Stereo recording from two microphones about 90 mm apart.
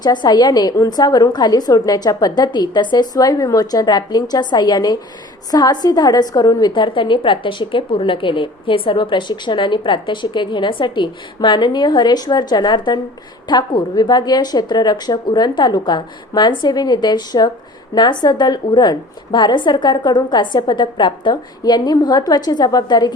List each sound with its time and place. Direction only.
0.0 s a woman's voice: 55° left (ahead or behind)